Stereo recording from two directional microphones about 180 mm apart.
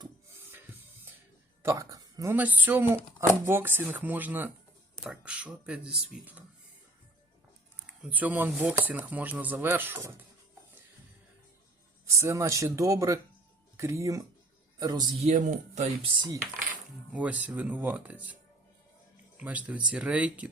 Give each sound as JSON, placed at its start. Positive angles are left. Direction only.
{"t": 1.6, "sound": "speech", "side_deg": -20}
{"t": 7.9, "sound": "speech", "side_deg": -5}
{"t": 12.0, "sound": "a man's voice", "side_deg": -15}
{"t": 15.2, "sound": "speech", "side_deg": -40}
{"t": 17.1, "sound": "speech", "side_deg": -10}
{"t": 19.4, "sound": "speech", "side_deg": -10}